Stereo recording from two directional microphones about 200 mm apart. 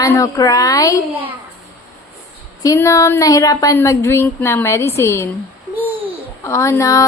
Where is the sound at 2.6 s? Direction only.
15° left (ahead or behind).